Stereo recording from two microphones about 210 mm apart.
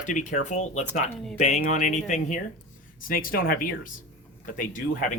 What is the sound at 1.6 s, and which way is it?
Speech, 35° left (ahead or behind).